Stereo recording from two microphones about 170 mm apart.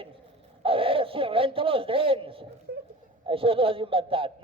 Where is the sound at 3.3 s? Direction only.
30° right (ahead or behind).